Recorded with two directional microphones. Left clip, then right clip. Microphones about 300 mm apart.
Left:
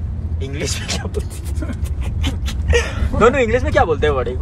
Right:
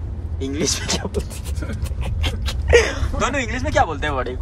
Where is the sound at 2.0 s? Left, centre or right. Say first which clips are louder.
Even; right.